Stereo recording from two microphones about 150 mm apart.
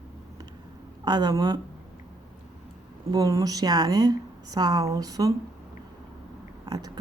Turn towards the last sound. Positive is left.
turn(degrees=-25)  # may be behind; listen again after turning